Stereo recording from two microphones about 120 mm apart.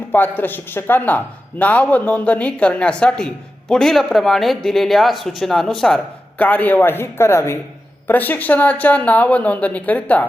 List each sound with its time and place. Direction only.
0.1 s a man's voice: 15° left (ahead or behind)
6.4 s a man's voice: 15° left (ahead or behind)